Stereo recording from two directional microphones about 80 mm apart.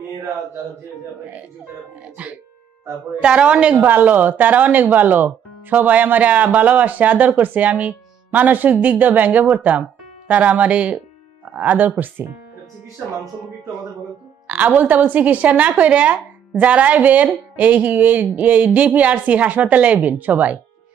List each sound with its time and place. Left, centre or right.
3.2 s a woman's voice: centre
3.7 s speech: right
14.5 s speech: centre